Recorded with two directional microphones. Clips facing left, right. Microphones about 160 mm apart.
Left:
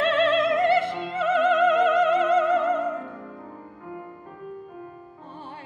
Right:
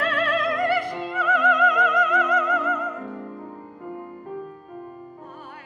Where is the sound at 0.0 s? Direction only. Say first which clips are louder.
Left 3 dB; 25° left (ahead or behind).